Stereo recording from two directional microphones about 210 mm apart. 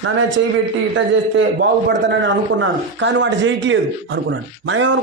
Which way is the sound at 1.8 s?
60° right (ahead or behind).